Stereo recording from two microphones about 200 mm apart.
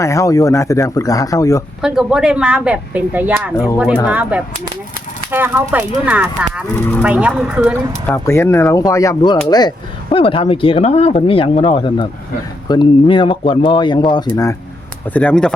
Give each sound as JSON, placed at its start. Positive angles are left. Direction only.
{"t": 0.0, "sound": "speech", "side_deg": 15}
{"t": 1.8, "sound": "speech", "side_deg": -5}
{"t": 6.7, "sound": "speech", "side_deg": 10}
{"t": 7.0, "sound": "speech", "side_deg": -5}
{"t": 8.0, "sound": "speech", "side_deg": 10}
{"t": 15.1, "sound": "speech", "side_deg": 5}